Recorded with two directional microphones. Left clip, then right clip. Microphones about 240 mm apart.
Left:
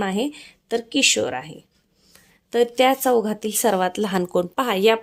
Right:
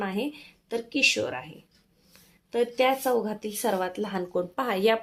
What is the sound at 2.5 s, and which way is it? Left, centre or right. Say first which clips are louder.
Speech: left 6 dB; left.